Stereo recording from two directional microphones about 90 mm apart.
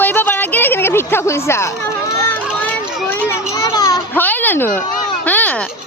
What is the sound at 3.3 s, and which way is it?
Children playing, 45° left (ahead or behind).